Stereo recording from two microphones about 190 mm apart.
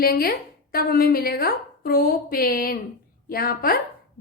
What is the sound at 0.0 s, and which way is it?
Speech, 55° left (ahead or behind).